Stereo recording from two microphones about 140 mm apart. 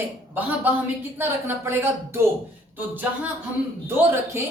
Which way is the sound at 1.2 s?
15° right (ahead or behind).